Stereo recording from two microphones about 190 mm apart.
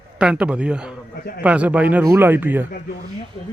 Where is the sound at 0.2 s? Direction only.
5° right (ahead or behind).